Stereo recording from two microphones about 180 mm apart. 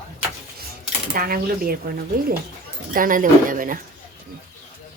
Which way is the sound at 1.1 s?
55° right (ahead or behind).